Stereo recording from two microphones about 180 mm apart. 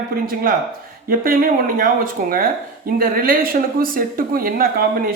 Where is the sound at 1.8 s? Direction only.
55° right (ahead or behind).